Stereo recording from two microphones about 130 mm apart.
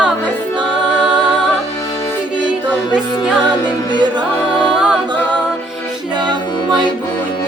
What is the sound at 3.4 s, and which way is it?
Music, 35° right (ahead or behind).